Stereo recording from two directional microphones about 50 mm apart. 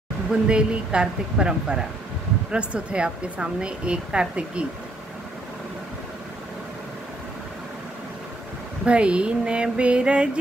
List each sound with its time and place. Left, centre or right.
0.3 s a woman's voice: centre
8.8 s a woman's voice: right